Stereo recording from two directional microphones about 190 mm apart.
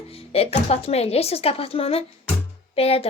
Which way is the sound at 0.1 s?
30° left (ahead or behind).